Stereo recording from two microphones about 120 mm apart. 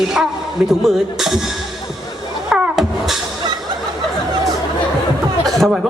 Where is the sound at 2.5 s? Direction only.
5° right (ahead or behind).